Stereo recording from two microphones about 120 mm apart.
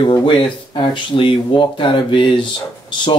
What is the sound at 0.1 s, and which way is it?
Speech, 40° left (ahead or behind).